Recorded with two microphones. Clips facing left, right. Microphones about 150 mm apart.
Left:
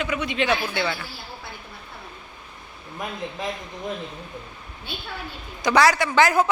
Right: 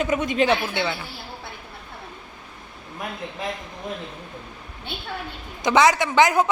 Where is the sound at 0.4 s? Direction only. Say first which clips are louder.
Right 2 dB; 25° right (ahead or behind).